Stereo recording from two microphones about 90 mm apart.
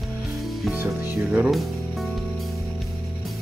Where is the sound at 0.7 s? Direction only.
20° right (ahead or behind).